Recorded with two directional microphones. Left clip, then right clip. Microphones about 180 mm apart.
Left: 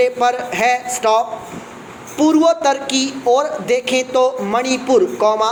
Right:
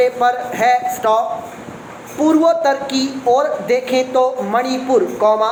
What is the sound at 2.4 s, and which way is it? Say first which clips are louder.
A man's voice: even; 30° left (ahead or behind).